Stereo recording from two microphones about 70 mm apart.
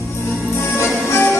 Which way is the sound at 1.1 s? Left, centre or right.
Left.